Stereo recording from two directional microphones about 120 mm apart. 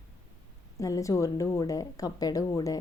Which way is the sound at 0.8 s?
25° left (ahead or behind).